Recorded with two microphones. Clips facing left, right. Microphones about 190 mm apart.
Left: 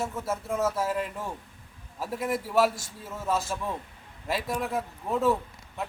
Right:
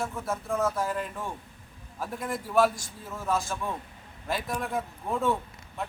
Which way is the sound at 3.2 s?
5° left (ahead or behind).